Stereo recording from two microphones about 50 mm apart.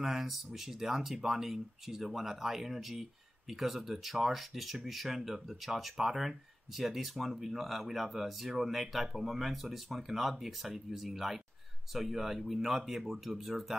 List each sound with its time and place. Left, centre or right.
0.0 s speech: centre